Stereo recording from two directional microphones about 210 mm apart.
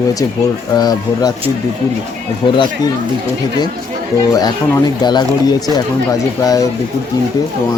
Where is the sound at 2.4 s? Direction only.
20° left (ahead or behind).